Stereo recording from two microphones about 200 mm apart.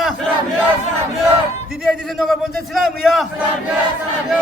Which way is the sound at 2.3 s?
Centre (ahead or behind).